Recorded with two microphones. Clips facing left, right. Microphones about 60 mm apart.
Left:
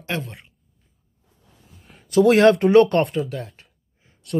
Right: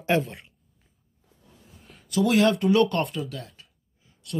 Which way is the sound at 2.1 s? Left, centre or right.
Left.